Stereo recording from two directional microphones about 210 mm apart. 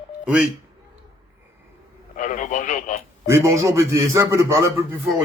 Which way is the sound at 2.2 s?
40° left (ahead or behind).